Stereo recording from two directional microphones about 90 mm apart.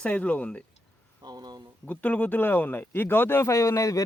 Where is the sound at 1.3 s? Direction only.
50° right (ahead or behind).